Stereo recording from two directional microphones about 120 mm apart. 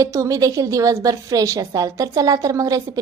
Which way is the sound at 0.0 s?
25° right (ahead or behind).